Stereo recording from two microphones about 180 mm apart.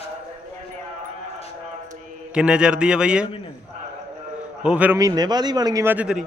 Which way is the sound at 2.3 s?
5° right (ahead or behind).